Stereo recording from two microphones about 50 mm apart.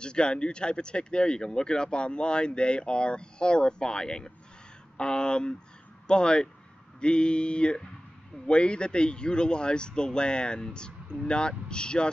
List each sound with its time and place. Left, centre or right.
0.0 s speech: centre